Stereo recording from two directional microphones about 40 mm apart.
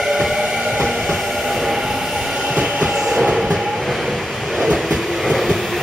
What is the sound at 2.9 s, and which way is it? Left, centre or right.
Train, centre.